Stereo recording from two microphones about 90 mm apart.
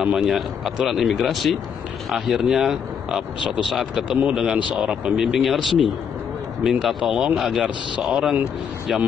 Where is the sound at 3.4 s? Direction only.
65° left (ahead or behind).